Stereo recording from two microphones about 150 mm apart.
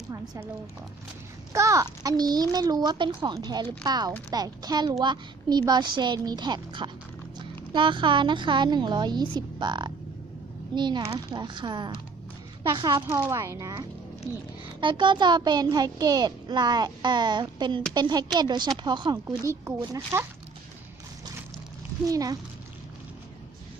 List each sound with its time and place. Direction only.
1.5 s a child's voice: 20° right (ahead or behind)
13.1 s a child's voice: 20° right (ahead or behind)
14.8 s a child's voice: 30° right (ahead or behind)
22.0 s a child's voice: 25° right (ahead or behind)